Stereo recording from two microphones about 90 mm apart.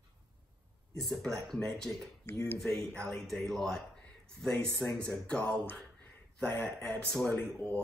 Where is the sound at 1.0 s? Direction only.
Centre (ahead or behind).